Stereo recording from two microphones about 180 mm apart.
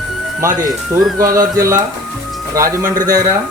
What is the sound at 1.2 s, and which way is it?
Speech, 15° right (ahead or behind).